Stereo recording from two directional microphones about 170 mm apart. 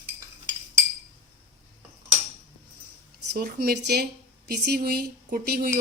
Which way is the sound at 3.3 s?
60° right (ahead or behind).